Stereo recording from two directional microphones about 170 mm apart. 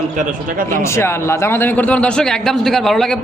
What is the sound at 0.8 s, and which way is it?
A man's voice, 15° left (ahead or behind).